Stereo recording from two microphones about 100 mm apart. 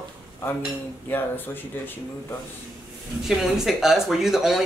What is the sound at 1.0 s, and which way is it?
Speech, 20° left (ahead or behind).